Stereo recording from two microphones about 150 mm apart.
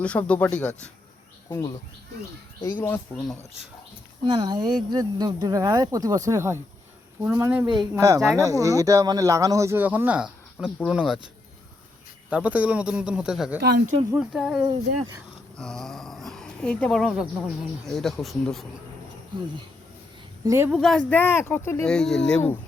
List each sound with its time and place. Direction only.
0.0 s speech: 10° left (ahead or behind)
1.5 s speech: 20° left (ahead or behind)
2.6 s speech: 30° left (ahead or behind)
2.8 s speech: 15° left (ahead or behind)
4.3 s speech: 30° right (ahead or behind); by 11.2 s 5° right (ahead or behind)
12.3 s speech: 10° right (ahead or behind)
13.6 s speech: 85° right
14.2 s speech: 5° right (ahead or behind)
20.4 s a woman's voice: 20° right (ahead or behind)
20.7 s speech: 5° right (ahead or behind)
21.1 s speech: 15° left (ahead or behind)
21.8 s speech: 5° left (ahead or behind)